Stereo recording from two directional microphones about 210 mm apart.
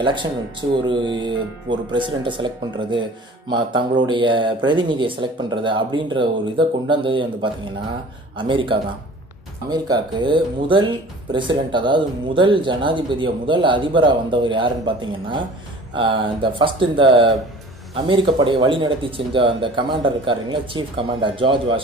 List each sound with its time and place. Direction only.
0.0 s speech: 20° right (ahead or behind)